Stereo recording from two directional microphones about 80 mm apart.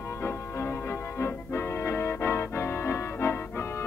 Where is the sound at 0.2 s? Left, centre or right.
Left.